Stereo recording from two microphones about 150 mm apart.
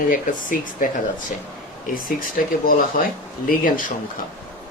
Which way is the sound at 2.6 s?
70° left (ahead or behind).